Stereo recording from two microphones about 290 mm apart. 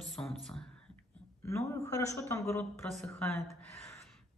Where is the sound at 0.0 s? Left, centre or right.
Centre.